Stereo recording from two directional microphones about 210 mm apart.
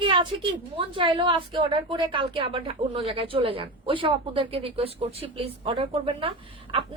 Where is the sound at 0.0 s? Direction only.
25° right (ahead or behind).